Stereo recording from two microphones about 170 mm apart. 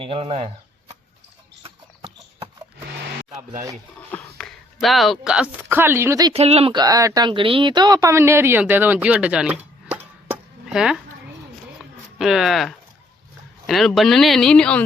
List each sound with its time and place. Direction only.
0.0 s speech: 30° right (ahead or behind)
4.1 s speech: 5° left (ahead or behind); by 6.3 s 20° right (ahead or behind)
6.3 s speech: 35° right (ahead or behind)
6.7 s speech: 20° right (ahead or behind); by 11.0 s 5° right (ahead or behind)
11.8 s a sound: centre (ahead or behind)
13.7 s speech: centre (ahead or behind)